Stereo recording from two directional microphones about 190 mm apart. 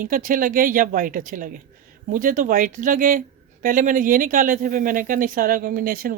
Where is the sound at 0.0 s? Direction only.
45° right (ahead or behind).